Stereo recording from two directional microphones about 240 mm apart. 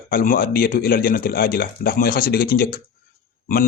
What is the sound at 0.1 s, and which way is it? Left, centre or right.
A man's voice, left.